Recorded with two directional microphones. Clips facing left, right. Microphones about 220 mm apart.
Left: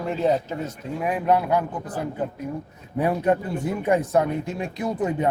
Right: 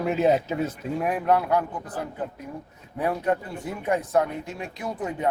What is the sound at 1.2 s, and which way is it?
Speech, 15° left (ahead or behind).